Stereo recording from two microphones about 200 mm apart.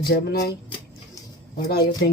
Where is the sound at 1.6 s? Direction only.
50° left (ahead or behind).